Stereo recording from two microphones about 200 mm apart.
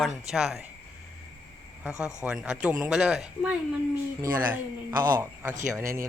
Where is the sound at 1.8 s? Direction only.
5° right (ahead or behind).